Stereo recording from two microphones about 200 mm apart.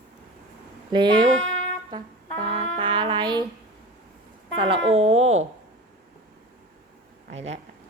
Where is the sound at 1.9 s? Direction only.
25° right (ahead or behind).